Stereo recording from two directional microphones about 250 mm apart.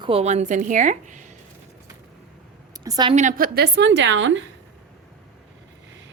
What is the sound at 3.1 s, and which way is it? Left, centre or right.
A woman's voice, right.